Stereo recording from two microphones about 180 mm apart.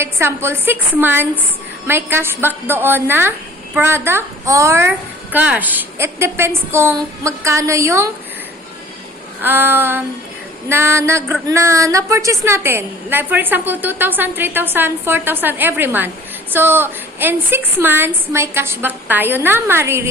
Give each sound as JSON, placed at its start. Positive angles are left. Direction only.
{"t": 0.0, "sound": "speech", "side_deg": -15}
{"t": 9.4, "sound": "speech", "side_deg": -10}